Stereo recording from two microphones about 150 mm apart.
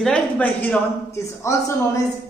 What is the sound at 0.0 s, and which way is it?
A man's voice, 10° left (ahead or behind).